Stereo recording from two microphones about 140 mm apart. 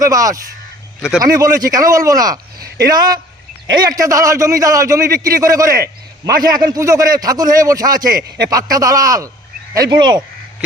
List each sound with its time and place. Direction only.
0.0 s a man's voice: 25° right (ahead or behind)
9.7 s frog: 30° right (ahead or behind)